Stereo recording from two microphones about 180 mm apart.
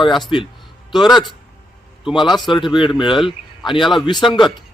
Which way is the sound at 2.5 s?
25° left (ahead or behind).